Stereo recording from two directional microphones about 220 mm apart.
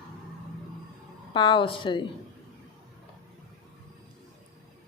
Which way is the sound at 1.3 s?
20° left (ahead or behind).